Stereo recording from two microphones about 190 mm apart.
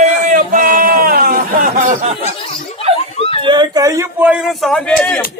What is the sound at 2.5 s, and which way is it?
Snicker, 30° left (ahead or behind).